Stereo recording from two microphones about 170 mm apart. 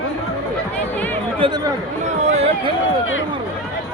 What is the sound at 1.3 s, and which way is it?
Speech, 25° right (ahead or behind).